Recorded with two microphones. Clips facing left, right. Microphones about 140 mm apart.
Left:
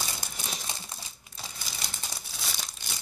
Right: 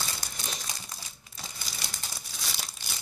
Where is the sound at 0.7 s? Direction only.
25° left (ahead or behind).